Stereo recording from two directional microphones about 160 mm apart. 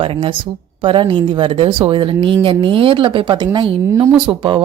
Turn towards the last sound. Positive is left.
turn(degrees=-30)  # may be behind; listen again after turning